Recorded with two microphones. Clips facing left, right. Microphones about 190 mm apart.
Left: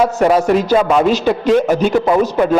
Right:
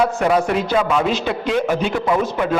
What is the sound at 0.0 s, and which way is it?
A man's voice, 40° left (ahead or behind).